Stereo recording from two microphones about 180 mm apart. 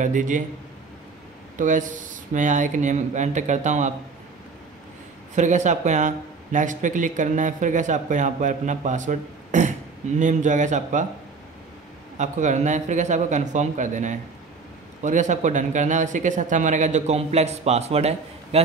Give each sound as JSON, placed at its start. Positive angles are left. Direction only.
{"t": 0.0, "sound": "speech", "side_deg": -45}
{"t": 1.6, "sound": "speech", "side_deg": -45}
{"t": 5.3, "sound": "speech", "side_deg": -40}
{"t": 12.2, "sound": "a man's voice", "side_deg": -40}